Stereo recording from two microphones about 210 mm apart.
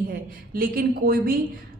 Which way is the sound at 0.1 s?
45° right (ahead or behind).